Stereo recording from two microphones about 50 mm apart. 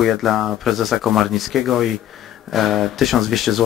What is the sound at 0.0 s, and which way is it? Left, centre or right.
Speech, centre.